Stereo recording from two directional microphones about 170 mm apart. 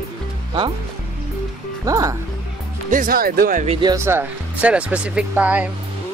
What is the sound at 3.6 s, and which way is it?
Speech, 35° right (ahead or behind).